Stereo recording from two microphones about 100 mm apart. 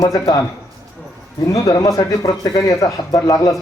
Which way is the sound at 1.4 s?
35° left (ahead or behind).